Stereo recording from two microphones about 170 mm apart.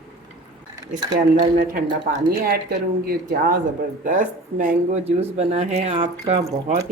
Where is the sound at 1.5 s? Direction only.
55° right (ahead or behind).